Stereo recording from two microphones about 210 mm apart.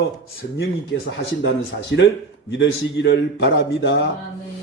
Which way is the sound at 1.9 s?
60° left (ahead or behind).